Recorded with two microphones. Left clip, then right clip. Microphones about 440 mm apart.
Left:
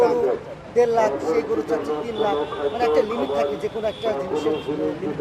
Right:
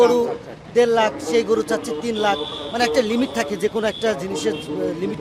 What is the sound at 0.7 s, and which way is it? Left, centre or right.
Speech, right.